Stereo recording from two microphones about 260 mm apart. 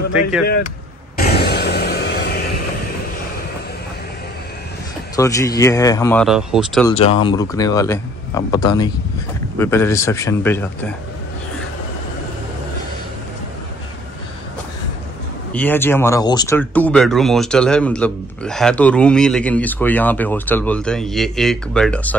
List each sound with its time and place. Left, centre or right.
1.1 s a sound: left
5.1 s a man's voice: centre
7.0 s a man's voice: left
15.5 s speech: centre